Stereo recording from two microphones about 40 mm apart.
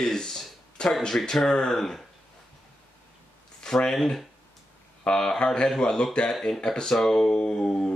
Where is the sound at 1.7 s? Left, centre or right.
Centre.